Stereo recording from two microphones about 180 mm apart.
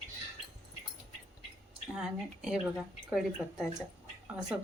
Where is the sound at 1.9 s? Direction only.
5° right (ahead or behind).